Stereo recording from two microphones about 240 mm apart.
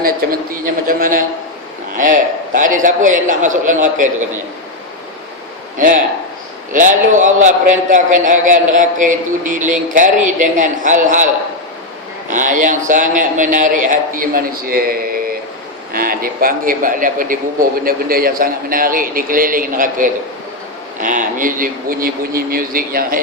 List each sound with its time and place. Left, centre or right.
0.0 s a man's voice: right
5.7 s a man's voice: right
12.3 s a man's voice: right